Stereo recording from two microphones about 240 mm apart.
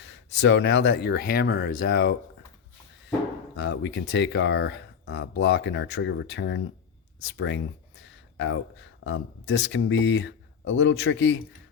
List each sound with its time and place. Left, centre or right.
0.0 s speech: left
3.6 s speech: left